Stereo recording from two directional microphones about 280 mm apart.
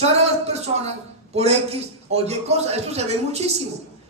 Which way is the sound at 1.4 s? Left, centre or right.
Right.